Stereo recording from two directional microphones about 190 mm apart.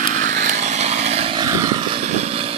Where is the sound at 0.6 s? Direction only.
35° right (ahead or behind).